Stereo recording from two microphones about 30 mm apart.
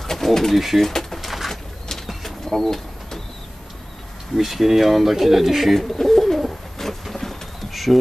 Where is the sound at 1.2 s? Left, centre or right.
Centre.